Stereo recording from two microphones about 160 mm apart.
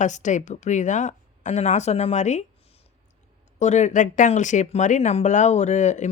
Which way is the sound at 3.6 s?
45° left (ahead or behind).